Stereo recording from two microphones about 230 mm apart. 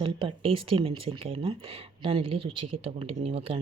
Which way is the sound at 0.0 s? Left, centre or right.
Right.